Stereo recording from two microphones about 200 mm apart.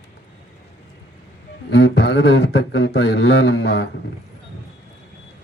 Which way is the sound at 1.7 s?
60° left (ahead or behind).